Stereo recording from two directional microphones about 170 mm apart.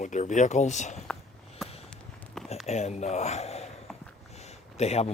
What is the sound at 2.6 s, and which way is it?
Speech, 40° left (ahead or behind).